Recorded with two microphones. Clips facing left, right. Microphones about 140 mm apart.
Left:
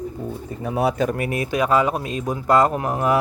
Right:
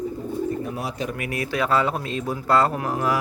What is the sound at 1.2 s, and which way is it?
Speech, 25° left (ahead or behind).